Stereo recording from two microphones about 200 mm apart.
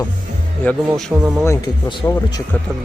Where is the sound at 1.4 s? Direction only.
15° left (ahead or behind).